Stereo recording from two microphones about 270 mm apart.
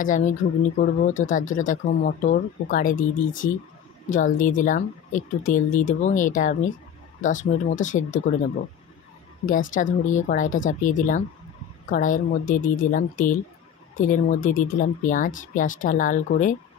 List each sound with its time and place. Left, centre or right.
0.0 s speech: left
9.5 s speech: left